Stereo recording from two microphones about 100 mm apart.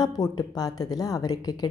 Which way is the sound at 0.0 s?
40° left (ahead or behind).